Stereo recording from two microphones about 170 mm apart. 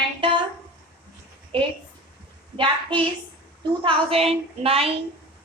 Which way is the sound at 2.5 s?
30° right (ahead or behind).